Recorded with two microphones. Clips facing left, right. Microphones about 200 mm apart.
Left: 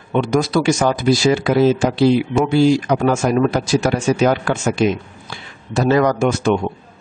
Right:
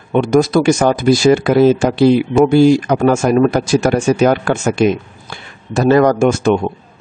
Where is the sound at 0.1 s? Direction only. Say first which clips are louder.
Right 5 dB; 50° right (ahead or behind).